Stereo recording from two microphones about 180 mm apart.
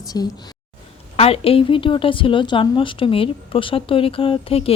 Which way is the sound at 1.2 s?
35° left (ahead or behind).